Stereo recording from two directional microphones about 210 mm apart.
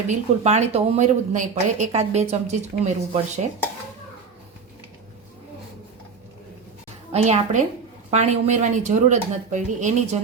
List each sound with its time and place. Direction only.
0.1 s speech: 30° right (ahead or behind)
7.1 s speech: 30° right (ahead or behind)